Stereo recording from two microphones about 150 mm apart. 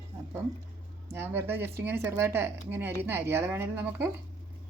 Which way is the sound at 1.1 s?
15° right (ahead or behind).